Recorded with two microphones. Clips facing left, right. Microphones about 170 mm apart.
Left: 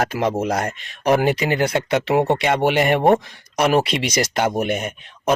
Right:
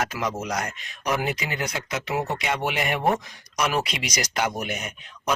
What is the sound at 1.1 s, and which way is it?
Speech, 65° left (ahead or behind).